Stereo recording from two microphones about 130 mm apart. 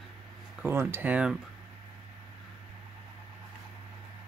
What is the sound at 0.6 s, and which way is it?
Speech, 15° right (ahead or behind).